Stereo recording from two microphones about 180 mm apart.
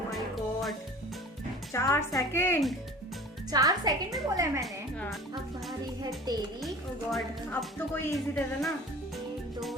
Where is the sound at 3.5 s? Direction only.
20° right (ahead or behind).